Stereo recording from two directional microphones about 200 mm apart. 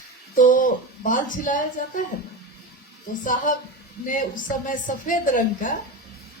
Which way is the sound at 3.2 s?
40° left (ahead or behind).